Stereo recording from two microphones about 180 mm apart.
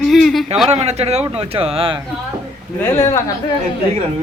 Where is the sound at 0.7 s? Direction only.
35° right (ahead or behind).